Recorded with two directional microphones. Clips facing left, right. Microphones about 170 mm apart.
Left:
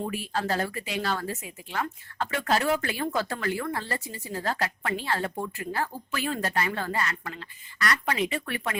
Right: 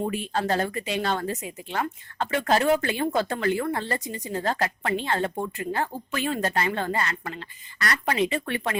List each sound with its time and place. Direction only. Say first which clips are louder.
0.0 s a woman's voice: right 3 dB; 30° right (ahead or behind)